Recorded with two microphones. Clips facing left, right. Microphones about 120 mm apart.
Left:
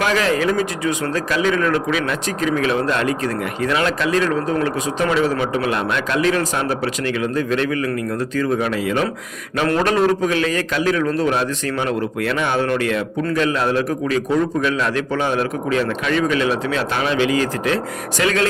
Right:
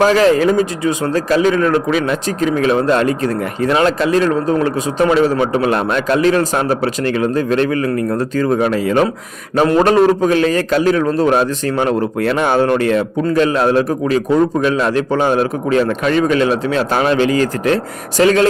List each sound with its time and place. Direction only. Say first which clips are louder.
0.0 s speech: right 7 dB; 35° right (ahead or behind)